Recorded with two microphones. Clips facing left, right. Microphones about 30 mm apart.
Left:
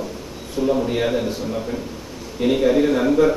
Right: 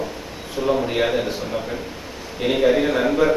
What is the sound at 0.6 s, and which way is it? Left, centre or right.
A man's voice, centre.